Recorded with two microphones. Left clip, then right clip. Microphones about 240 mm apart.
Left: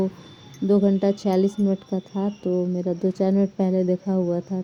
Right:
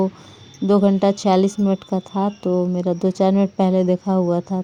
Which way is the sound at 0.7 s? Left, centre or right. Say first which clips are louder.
Right 4 dB; right.